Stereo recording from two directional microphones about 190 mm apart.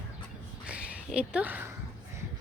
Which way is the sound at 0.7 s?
5° right (ahead or behind).